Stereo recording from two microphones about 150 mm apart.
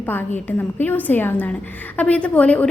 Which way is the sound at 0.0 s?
15° left (ahead or behind).